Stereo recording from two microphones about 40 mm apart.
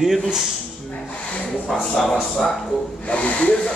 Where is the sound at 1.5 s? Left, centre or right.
Centre.